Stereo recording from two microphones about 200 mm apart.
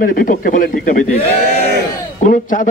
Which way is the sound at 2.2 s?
40° left (ahead or behind).